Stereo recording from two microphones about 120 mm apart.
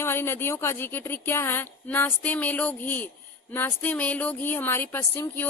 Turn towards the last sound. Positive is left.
turn(degrees=20)  # may be behind; listen again after turning